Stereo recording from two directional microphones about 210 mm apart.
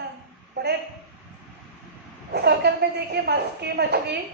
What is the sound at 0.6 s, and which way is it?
Speech, 55° right (ahead or behind).